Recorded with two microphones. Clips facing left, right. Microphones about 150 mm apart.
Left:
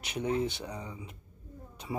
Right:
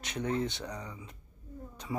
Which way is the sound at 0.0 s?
10° left (ahead or behind).